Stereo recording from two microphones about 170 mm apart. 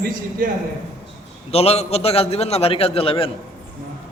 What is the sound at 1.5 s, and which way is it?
A man's voice, 35° left (ahead or behind).